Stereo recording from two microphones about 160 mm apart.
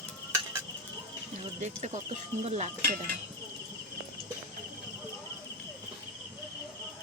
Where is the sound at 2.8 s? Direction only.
70° right (ahead or behind).